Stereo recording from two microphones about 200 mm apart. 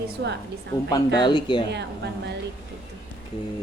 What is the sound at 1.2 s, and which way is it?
Speech, 25° left (ahead or behind).